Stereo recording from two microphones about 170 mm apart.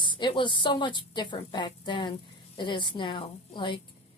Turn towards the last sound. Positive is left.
turn(degrees=30)  # may be behind; listen again after turning